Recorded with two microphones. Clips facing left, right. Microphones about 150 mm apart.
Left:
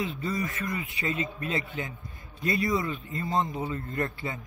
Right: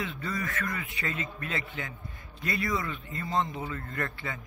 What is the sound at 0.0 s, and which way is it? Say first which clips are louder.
Speech: left 3 dB; 20° left (ahead or behind).